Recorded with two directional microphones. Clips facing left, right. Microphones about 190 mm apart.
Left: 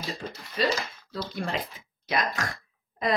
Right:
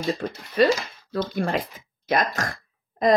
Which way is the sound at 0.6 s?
60° right (ahead or behind).